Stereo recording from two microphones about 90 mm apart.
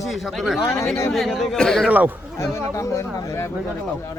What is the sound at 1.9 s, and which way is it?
Speech, 20° right (ahead or behind).